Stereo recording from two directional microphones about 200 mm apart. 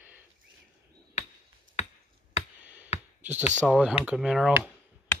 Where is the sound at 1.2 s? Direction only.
35° left (ahead or behind).